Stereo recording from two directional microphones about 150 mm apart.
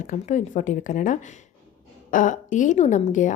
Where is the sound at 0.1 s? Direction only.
55° left (ahead or behind).